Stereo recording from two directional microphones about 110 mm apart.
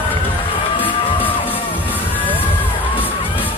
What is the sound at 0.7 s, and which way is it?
Music, 15° left (ahead or behind).